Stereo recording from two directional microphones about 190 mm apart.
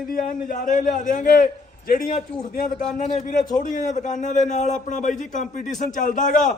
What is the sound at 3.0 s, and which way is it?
A man's voice, 35° left (ahead or behind).